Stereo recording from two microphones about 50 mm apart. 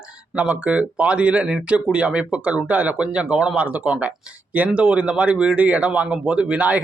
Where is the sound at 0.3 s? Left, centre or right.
Right.